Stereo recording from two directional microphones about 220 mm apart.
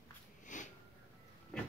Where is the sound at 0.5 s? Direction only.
35° left (ahead or behind).